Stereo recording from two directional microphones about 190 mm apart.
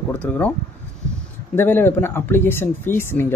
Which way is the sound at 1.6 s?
10° left (ahead or behind).